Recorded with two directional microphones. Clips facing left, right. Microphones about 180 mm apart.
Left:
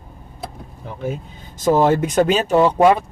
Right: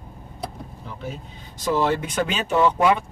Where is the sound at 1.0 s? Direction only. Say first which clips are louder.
Left 9 dB; 50° left (ahead or behind).